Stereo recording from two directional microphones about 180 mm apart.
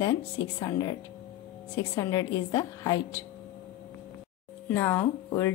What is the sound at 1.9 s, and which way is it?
Speech, 15° left (ahead or behind).